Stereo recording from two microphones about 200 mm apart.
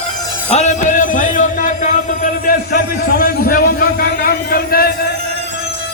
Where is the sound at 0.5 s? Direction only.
35° left (ahead or behind).